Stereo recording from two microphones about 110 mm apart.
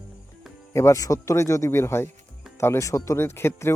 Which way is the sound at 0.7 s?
25° left (ahead or behind).